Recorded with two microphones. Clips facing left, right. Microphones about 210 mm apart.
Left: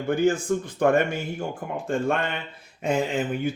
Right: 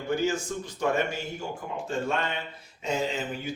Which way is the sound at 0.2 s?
55° left (ahead or behind).